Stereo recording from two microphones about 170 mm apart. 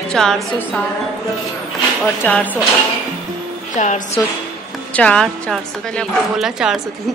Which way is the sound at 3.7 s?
45° left (ahead or behind).